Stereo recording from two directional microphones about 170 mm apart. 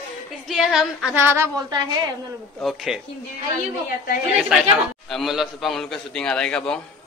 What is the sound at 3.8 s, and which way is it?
Speech, 60° left (ahead or behind).